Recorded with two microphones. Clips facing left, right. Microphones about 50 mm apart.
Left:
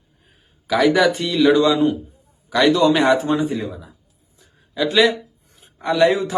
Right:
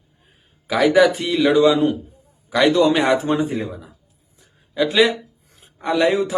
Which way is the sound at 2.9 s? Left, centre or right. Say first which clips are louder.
Left 1 dB; centre.